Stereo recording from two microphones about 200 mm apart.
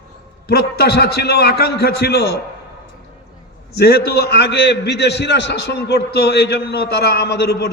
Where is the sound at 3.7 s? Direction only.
55° left (ahead or behind).